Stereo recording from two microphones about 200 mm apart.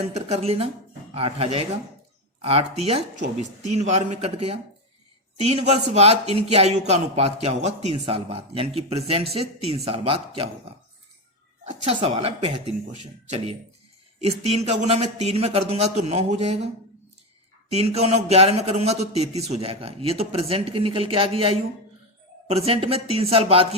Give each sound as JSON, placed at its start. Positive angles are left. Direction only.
{"t": 0.1, "sound": "a man's voice", "side_deg": -30}
{"t": 11.9, "sound": "speech", "side_deg": -25}
{"t": 17.7, "sound": "a man's voice", "side_deg": -30}